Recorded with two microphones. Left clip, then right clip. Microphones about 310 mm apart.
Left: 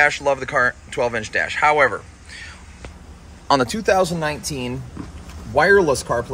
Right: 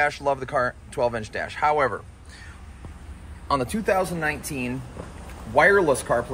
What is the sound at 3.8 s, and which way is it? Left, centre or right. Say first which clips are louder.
Speech: left 5 dB; centre.